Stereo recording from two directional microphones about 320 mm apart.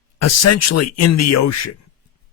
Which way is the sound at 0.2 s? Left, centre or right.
Left.